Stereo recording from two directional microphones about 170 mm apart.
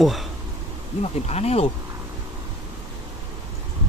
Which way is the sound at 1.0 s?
40° left (ahead or behind).